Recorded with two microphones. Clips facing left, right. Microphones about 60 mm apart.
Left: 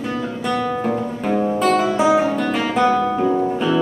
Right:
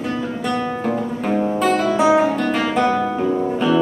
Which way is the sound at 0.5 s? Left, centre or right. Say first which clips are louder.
Left 2 dB; centre.